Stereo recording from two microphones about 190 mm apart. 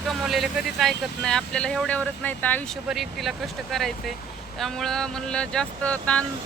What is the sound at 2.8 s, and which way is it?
Speech, centre (ahead or behind).